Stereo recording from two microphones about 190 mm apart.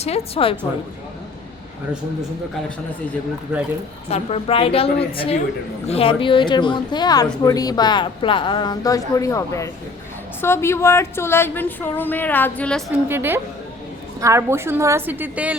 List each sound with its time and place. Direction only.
0.0 s a woman's voice: 30° left (ahead or behind)
4.1 s a woman's voice: 35° left (ahead or behind); by 12.8 s 5° left (ahead or behind)
13.1 s a woman's voice: 10° right (ahead or behind)